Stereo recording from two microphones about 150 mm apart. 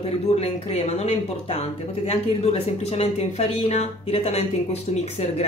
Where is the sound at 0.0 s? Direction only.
45° left (ahead or behind).